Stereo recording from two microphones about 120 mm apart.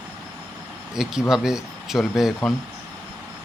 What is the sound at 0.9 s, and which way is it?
Speech, 5° right (ahead or behind).